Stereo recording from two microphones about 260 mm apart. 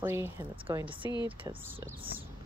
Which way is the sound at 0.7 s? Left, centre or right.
Centre.